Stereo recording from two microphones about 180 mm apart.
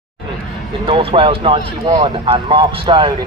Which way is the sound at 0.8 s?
30° right (ahead or behind).